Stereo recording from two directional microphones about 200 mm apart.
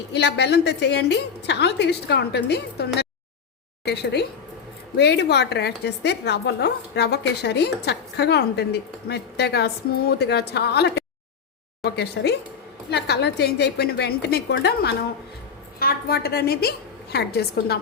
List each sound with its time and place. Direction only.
0.1 s a woman's voice: 60° left (ahead or behind)